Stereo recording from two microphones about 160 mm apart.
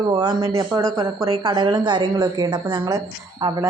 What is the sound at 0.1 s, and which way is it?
Speech, 25° right (ahead or behind).